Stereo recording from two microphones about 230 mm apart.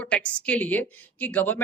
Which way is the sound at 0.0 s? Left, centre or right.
Centre.